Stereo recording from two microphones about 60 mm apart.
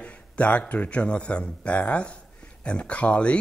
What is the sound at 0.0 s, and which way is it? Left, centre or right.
Speech, left.